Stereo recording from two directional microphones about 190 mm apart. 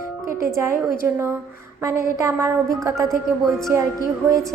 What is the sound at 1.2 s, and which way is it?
A woman's voice, 15° right (ahead or behind).